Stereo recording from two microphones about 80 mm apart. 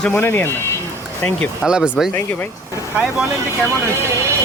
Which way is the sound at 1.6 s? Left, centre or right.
Centre.